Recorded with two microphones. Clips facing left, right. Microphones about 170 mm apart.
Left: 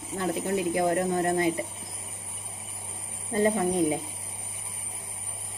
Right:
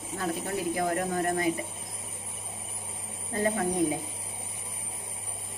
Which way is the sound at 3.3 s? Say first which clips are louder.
Left 4 dB; 25° left (ahead or behind).